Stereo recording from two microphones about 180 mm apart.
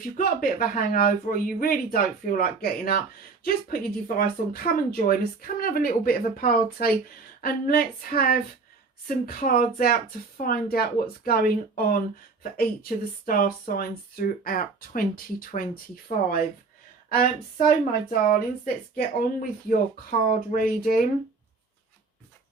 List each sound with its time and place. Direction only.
0.2 s speech: 50° left (ahead or behind)
4.2 s speech: 55° left (ahead or behind)